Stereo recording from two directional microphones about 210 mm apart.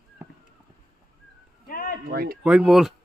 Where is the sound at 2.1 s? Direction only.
45° right (ahead or behind).